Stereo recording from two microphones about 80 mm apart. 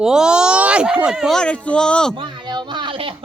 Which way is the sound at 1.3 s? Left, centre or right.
Centre.